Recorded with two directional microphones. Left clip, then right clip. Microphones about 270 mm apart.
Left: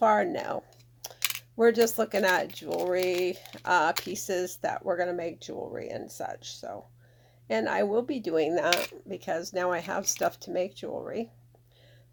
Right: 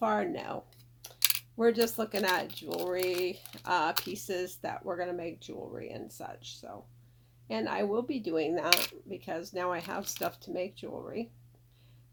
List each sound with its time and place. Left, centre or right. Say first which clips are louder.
0.0 s speech: left 7 dB; left
1.0 s computer keyboard: left 8 dB; left
1.5 s speech: left 6 dB; left